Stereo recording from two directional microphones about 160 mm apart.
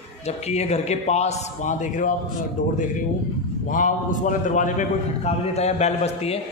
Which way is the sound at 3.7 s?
55° left (ahead or behind).